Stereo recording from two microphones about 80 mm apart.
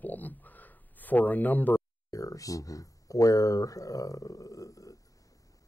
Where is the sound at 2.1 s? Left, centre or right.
Left.